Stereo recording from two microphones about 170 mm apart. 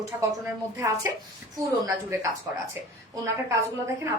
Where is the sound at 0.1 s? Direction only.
15° right (ahead or behind).